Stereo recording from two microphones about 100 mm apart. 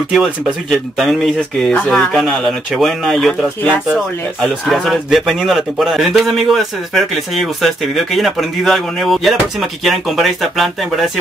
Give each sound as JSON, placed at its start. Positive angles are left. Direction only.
{"t": 0.1, "sound": "speech", "side_deg": 0}
{"t": 4.4, "sound": "speech", "side_deg": 0}